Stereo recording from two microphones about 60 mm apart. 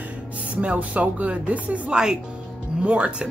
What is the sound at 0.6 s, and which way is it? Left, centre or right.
Speech, right.